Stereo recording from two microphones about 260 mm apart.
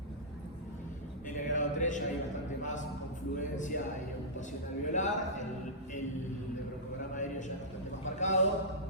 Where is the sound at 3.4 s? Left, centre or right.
Left.